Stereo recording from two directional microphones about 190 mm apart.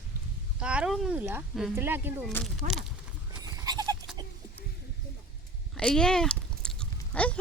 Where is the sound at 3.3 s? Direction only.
20° right (ahead or behind).